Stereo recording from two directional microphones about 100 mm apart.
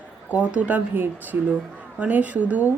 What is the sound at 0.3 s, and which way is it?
Speech, 15° right (ahead or behind).